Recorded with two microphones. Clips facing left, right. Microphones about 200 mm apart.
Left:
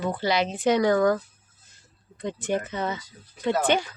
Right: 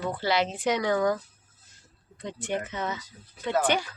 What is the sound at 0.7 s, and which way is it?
Speech, 40° left (ahead or behind).